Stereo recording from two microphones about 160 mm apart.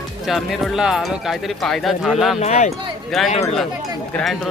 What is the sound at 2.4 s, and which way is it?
Speech, 45° left (ahead or behind).